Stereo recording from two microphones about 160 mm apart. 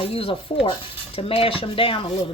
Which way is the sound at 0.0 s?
35° left (ahead or behind).